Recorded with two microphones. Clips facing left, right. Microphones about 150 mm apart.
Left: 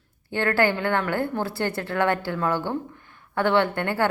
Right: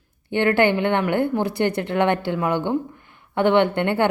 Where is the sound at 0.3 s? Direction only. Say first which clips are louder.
Right 4 dB; 20° right (ahead or behind).